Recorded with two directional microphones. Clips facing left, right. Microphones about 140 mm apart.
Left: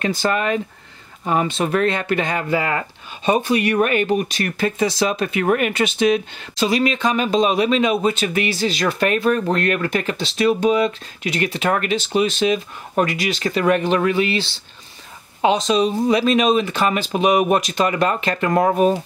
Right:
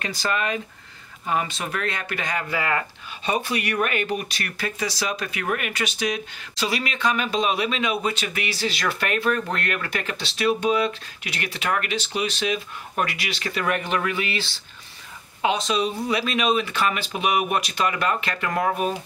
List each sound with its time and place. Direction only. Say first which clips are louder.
0.3 s speech: left 5 dB; 35° left (ahead or behind)
7.3 s speech: left 7 dB; 35° left (ahead or behind)
13.5 s speech: left 7 dB; 25° left (ahead or behind)
15.7 s speech: left 7 dB; 35° left (ahead or behind)